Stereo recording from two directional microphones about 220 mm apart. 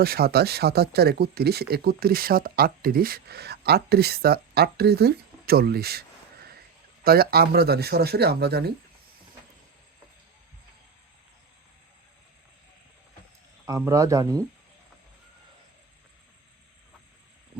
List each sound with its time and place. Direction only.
0.0 s speech: 45° right (ahead or behind)
13.7 s a man's voice: 15° right (ahead or behind)